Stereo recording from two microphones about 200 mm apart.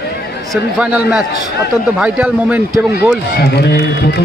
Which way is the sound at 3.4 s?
55° left (ahead or behind).